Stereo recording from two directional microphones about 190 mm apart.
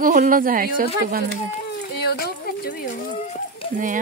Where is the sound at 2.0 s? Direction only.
55° left (ahead or behind).